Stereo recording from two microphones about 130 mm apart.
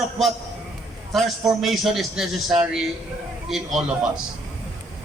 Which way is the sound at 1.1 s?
Centre (ahead or behind).